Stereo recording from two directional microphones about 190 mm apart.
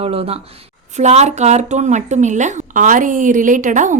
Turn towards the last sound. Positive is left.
turn(degrees=-40)  # may be behind; listen again after turning